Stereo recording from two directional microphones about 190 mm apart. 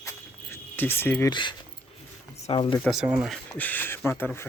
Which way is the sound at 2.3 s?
30° left (ahead or behind).